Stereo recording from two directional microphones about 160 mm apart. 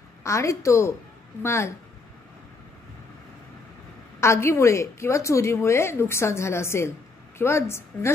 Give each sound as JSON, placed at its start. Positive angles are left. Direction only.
{"t": 0.2, "sound": "a woman's voice", "side_deg": 20}
{"t": 4.2, "sound": "a woman's voice", "side_deg": 15}